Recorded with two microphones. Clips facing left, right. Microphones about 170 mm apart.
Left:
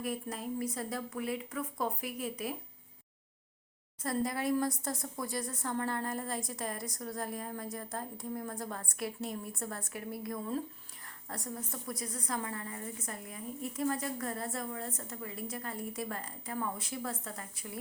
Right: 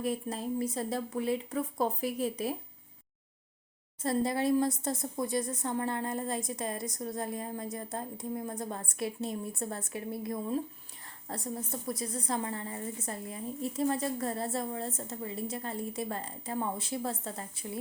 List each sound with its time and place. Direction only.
0.0 s a woman's voice: 25° right (ahead or behind)
4.0 s a woman's voice: 25° right (ahead or behind)